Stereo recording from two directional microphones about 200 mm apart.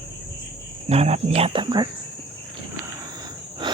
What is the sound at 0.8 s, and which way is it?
Cricket, 30° right (ahead or behind).